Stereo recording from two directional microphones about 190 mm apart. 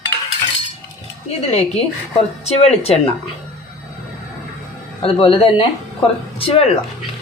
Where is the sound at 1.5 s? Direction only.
35° left (ahead or behind).